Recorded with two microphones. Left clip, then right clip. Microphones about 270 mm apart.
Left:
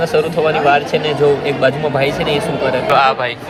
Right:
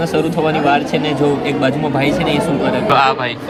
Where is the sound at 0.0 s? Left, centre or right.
Centre.